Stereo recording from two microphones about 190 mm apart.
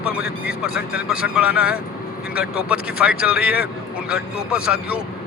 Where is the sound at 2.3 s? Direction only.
55° left (ahead or behind).